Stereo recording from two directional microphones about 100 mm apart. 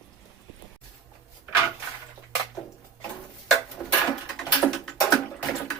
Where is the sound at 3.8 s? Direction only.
20° left (ahead or behind).